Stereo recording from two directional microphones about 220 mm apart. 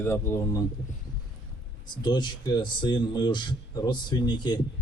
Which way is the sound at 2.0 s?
20° left (ahead or behind).